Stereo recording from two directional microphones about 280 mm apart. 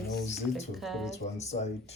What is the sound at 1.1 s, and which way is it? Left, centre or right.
Speech, left.